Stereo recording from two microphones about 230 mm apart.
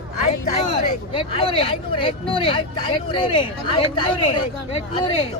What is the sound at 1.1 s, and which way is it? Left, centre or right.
Speech, left.